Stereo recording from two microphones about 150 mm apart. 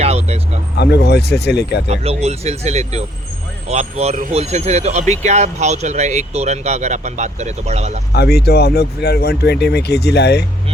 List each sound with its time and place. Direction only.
0.0 s speech: 45° right (ahead or behind)
0.8 s speech: 90° left
1.9 s speech: 45° right (ahead or behind)
8.1 s speech: 90° left